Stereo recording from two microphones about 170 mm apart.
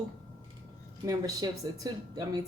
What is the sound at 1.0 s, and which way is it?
Speech, 20° right (ahead or behind).